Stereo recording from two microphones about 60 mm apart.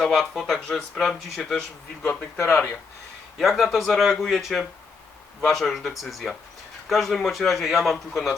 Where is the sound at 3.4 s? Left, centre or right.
Centre.